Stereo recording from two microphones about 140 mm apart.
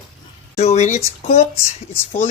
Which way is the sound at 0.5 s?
50° left (ahead or behind).